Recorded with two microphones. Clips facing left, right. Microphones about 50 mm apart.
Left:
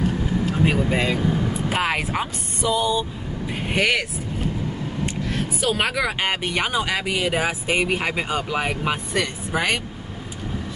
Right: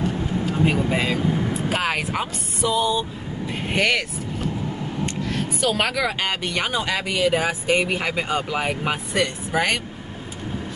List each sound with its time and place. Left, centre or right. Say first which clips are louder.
0.7 s speech: even; centre
3.6 s speech: even; centre
5.0 s a sound: even; centre
6.2 s speech: left 1 dB; centre